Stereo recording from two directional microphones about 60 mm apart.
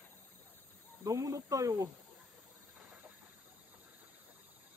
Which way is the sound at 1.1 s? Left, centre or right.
Right.